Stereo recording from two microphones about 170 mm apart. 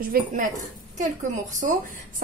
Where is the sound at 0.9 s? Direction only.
45° right (ahead or behind).